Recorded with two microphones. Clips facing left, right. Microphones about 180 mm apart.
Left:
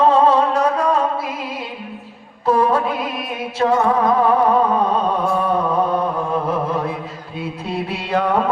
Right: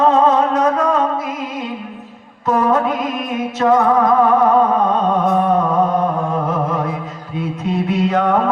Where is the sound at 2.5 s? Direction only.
30° left (ahead or behind).